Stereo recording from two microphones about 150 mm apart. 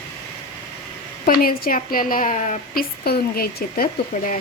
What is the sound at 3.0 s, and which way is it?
Speech, 90° left.